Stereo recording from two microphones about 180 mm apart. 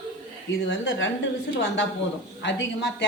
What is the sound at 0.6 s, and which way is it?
Speech, 85° left.